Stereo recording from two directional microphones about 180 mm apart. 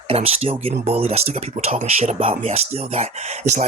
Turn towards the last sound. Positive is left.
turn(degrees=-40)  # may be behind; listen again after turning